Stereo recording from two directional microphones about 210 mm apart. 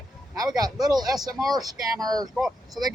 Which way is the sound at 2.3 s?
Centre (ahead or behind).